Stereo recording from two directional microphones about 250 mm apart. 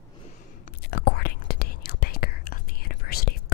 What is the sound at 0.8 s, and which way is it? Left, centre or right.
Whispering, left.